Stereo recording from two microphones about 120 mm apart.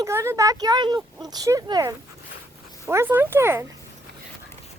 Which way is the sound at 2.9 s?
20° right (ahead or behind).